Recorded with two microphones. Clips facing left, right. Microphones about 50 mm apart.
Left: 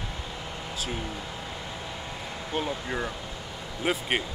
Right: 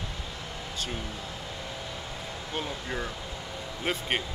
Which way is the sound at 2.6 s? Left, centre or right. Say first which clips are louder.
Left 3 dB; centre.